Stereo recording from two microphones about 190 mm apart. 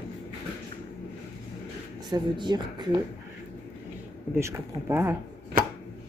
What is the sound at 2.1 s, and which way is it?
Speech, 20° right (ahead or behind).